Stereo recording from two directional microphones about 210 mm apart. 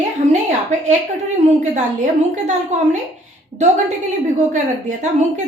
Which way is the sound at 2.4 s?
35° right (ahead or behind).